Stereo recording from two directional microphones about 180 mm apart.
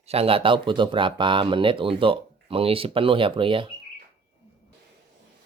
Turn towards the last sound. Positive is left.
turn(degrees=-30)  # may be behind; listen again after turning